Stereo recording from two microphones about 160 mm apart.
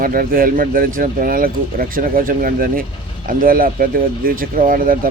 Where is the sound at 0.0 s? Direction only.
65° right (ahead or behind).